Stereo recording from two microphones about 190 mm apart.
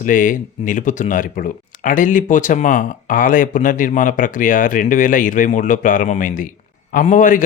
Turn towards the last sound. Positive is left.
turn(degrees=40)  # may be behind; listen again after turning